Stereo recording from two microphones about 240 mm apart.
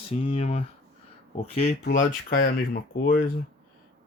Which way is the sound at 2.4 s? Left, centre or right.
Left.